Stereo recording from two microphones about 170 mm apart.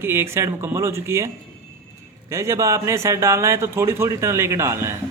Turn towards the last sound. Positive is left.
turn(degrees=-15)  # may be behind; listen again after turning